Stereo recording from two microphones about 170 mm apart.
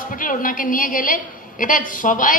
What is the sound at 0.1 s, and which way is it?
A woman's voice, 55° left (ahead or behind).